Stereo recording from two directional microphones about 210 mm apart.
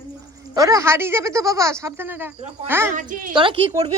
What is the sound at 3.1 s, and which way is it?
Speech, 40° right (ahead or behind).